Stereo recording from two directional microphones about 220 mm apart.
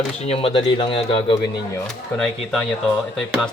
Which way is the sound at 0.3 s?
25° left (ahead or behind).